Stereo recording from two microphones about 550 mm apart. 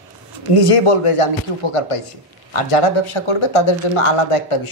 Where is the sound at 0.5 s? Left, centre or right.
Left.